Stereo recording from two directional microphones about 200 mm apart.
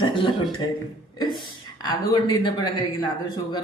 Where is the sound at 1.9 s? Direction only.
20° left (ahead or behind).